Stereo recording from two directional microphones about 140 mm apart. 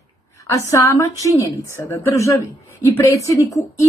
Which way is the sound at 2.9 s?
20° left (ahead or behind).